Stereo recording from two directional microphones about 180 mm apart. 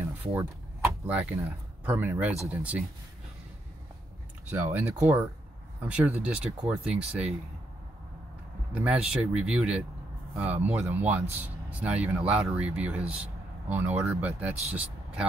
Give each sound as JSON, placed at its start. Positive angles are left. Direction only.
{"t": 0.2, "sound": "a sound", "side_deg": -10}
{"t": 0.8, "sound": "speech", "side_deg": -10}
{"t": 4.5, "sound": "speech", "side_deg": -10}
{"t": 8.7, "sound": "speech", "side_deg": -5}